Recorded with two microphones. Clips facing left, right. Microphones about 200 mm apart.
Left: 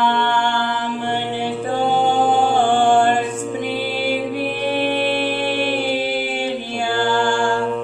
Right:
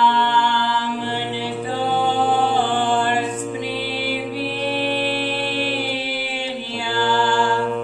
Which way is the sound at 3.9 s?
50° left (ahead or behind).